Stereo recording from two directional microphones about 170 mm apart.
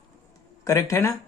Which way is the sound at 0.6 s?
20° left (ahead or behind).